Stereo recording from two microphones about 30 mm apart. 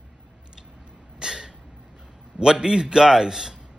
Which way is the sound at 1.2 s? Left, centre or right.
Right.